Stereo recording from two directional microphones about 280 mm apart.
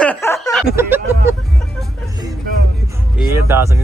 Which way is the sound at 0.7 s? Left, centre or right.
Centre.